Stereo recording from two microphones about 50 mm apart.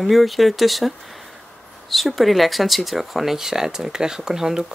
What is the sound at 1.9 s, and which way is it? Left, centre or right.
Speech, centre.